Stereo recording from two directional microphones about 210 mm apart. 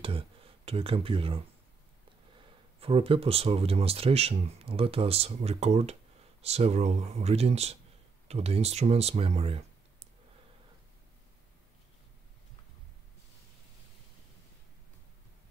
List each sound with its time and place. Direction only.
0.7 s speech: 25° right (ahead or behind)
2.8 s speech: 25° right (ahead or behind)